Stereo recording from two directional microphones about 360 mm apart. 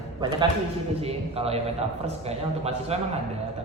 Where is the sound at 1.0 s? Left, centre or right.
Centre.